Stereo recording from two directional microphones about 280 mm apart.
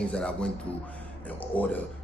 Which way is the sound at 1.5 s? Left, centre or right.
Centre.